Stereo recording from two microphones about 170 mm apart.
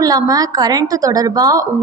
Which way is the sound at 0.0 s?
20° right (ahead or behind).